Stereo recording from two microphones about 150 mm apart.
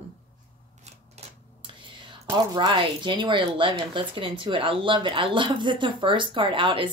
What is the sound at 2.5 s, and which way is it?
A woman's voice, 30° right (ahead or behind).